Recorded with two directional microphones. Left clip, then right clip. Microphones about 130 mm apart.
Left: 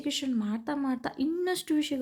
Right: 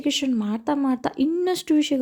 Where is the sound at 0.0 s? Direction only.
45° right (ahead or behind).